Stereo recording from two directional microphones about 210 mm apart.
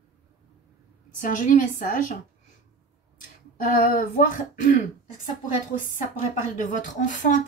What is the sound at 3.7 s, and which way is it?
Speech, 40° left (ahead or behind).